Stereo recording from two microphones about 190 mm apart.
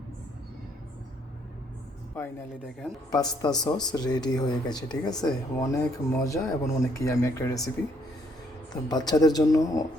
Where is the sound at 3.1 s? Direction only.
20° left (ahead or behind).